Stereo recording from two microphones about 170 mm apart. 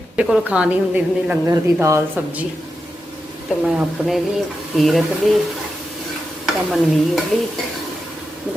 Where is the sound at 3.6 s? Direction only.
5° right (ahead or behind).